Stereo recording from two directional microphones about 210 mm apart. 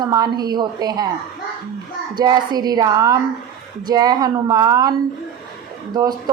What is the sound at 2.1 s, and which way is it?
A man's voice, 20° right (ahead or behind).